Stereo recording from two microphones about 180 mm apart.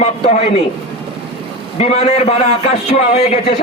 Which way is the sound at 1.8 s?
35° left (ahead or behind).